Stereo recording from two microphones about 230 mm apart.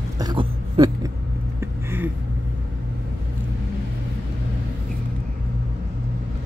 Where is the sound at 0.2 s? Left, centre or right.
Centre.